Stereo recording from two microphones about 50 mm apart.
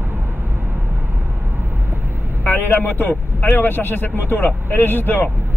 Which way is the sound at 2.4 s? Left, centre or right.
Left.